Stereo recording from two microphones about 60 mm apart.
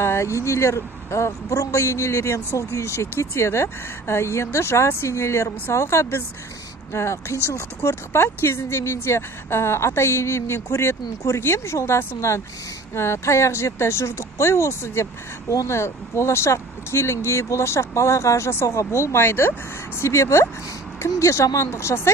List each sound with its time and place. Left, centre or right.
0.0 s a man's voice: left
20.0 s a man's voice: left